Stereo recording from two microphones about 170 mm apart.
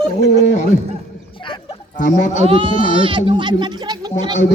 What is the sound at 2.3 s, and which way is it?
Speech, 35° right (ahead or behind).